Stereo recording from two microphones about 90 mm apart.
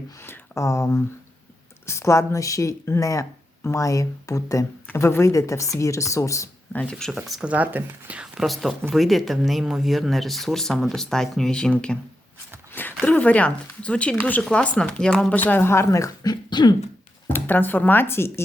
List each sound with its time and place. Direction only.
0.2 s speech: 30° left (ahead or behind)
7.2 s speech: 5° right (ahead or behind)
7.4 s speech: 15° right (ahead or behind)
8.4 s speech: centre (ahead or behind)
15.4 s speech: 20° left (ahead or behind); by 16.3 s 35° left (ahead or behind)
16.3 s beatboxing: 55° left (ahead or behind)
17.2 s speech: 20° left (ahead or behind)